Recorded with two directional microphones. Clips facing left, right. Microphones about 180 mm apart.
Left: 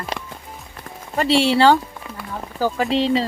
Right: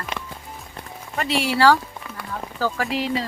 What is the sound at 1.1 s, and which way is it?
Speech, 30° left (ahead or behind).